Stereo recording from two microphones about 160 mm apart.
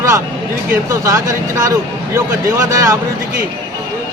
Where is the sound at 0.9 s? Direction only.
20° right (ahead or behind).